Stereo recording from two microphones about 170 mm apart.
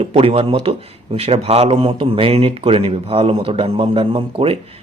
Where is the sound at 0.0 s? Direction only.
35° right (ahead or behind).